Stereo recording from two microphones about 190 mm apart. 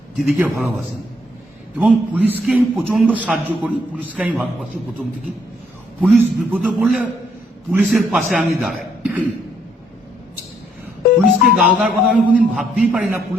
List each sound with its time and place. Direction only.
0.2 s a man's voice: 5° right (ahead or behind)
1.8 s a man's voice: 10° right (ahead or behind)
6.0 s a man's voice: 10° right (ahead or behind)
11.5 s a man's voice: 5° right (ahead or behind)